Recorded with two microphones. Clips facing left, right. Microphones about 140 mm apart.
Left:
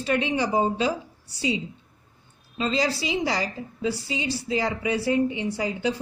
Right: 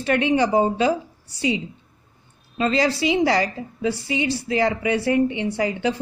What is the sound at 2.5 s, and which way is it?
A woman's voice, 60° right (ahead or behind).